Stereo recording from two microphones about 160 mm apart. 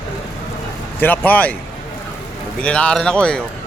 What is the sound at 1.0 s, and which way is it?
Speech, 10° left (ahead or behind).